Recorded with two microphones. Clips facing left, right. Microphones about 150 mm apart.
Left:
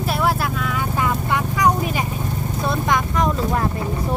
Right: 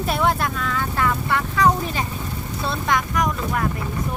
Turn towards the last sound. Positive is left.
turn(degrees=25)  # may be behind; listen again after turning